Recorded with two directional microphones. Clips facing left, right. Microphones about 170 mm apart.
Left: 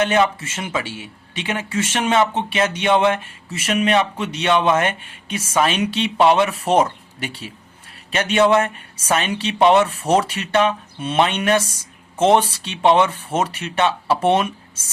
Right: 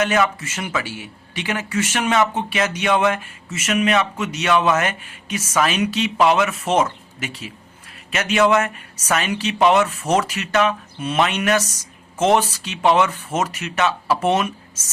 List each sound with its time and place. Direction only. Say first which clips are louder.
0.0 s speech: left 2 dB; 30° left (ahead or behind)